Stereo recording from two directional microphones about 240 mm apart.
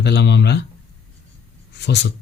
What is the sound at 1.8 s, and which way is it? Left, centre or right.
Speech, left.